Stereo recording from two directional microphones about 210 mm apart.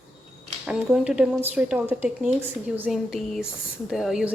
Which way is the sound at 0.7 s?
5° right (ahead or behind).